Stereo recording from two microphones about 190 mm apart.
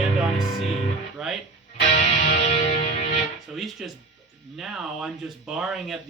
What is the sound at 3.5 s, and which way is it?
Speech, centre (ahead or behind).